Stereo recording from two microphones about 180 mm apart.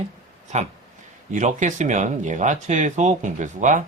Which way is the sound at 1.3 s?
40° right (ahead or behind).